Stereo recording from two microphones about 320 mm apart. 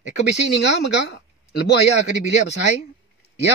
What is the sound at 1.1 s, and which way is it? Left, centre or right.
Speech, left.